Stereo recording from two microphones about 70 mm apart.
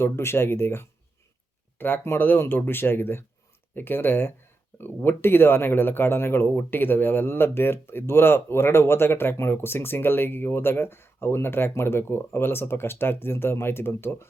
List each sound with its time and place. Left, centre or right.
0.0 s speech: left